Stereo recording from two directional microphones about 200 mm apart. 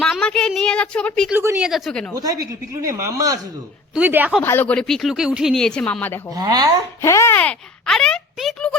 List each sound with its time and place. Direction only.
0.0 s a woman's voice: 5° left (ahead or behind)
1.3 s speech: 10° right (ahead or behind)
2.1 s speech: 15° right (ahead or behind)
4.4 s speech: 10° left (ahead or behind)
6.3 s speech: 20° right (ahead or behind)
7.0 s speech: 15° left (ahead or behind)